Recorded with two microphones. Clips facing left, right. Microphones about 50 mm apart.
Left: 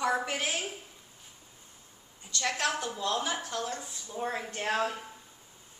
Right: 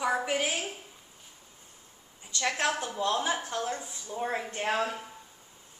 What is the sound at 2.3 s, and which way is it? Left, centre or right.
A woman's voice, right.